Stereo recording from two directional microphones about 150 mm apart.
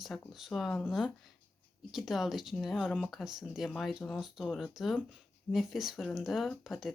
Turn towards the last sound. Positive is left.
turn(degrees=0)  # may be behind; listen again after turning